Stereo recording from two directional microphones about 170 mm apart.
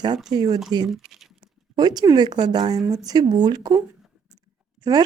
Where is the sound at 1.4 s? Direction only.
25° right (ahead or behind).